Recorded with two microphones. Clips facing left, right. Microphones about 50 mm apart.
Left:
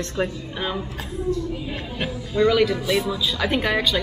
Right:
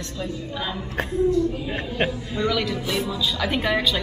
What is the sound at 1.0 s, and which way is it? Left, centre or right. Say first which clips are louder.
A woman's voice: right 10 dB; right.